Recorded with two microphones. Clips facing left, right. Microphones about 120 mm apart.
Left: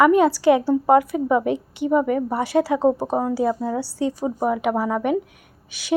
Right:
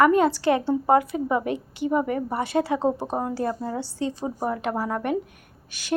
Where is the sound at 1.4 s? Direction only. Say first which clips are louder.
Left 4 dB; 65° left (ahead or behind).